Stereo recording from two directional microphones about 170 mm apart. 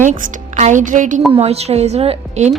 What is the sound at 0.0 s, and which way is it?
A woman's voice, 50° right (ahead or behind).